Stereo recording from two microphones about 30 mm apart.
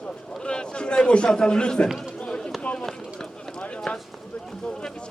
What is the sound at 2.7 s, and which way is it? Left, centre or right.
Run, centre.